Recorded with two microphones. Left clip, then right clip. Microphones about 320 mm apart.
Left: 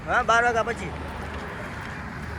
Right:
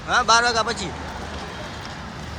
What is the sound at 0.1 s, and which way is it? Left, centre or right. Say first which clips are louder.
Speech: right 3 dB; centre.